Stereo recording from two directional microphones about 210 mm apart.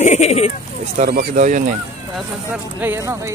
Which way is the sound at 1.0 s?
40° right (ahead or behind).